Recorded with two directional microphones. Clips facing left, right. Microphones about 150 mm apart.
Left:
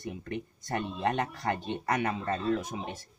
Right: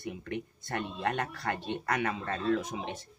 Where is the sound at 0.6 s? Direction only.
15° left (ahead or behind).